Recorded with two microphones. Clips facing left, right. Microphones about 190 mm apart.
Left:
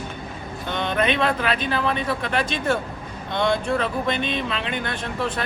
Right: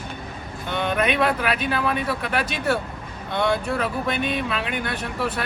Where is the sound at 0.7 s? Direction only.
10° right (ahead or behind).